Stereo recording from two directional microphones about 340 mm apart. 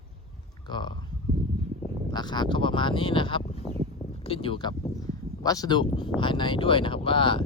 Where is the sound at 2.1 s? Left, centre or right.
Centre.